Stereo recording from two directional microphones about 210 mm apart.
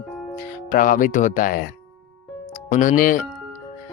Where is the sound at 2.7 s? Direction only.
40° left (ahead or behind).